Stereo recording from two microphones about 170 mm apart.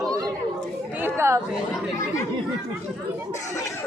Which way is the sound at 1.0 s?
15° right (ahead or behind).